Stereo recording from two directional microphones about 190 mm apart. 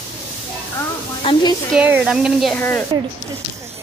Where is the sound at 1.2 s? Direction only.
25° left (ahead or behind).